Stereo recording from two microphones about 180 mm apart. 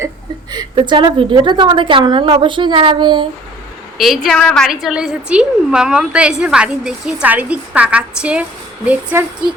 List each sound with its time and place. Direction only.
0.5 s a woman's voice: 25° right (ahead or behind)
3.9 s a woman's voice: centre (ahead or behind)